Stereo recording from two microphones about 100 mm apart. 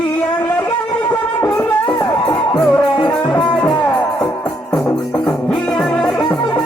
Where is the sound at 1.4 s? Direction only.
15° left (ahead or behind).